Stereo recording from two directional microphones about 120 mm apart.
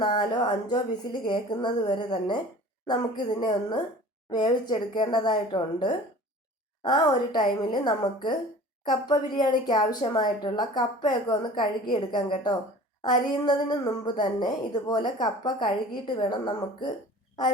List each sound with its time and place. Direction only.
0.0 s a woman's voice: 40° left (ahead or behind)